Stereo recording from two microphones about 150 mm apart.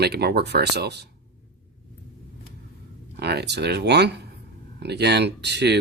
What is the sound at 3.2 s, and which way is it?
Speech, 90° right.